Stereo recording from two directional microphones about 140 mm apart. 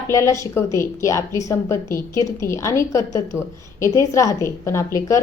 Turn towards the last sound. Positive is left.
turn(degrees=20)  # may be behind; listen again after turning